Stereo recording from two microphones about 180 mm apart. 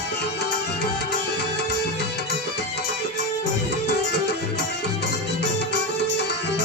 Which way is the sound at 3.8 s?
65° left (ahead or behind).